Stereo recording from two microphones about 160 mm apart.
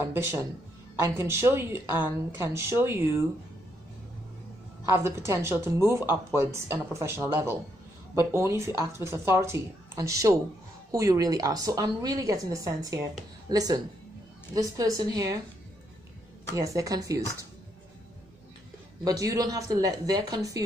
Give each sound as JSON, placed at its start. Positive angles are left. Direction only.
{"t": 0.1, "sound": "speech", "side_deg": -15}
{"t": 4.8, "sound": "a woman's voice", "side_deg": -15}
{"t": 16.5, "sound": "a woman's voice", "side_deg": -20}
{"t": 19.0, "sound": "a woman's voice", "side_deg": -20}